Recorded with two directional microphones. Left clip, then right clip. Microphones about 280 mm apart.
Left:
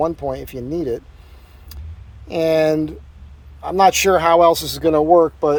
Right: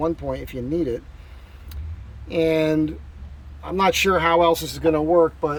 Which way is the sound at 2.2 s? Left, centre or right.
Centre.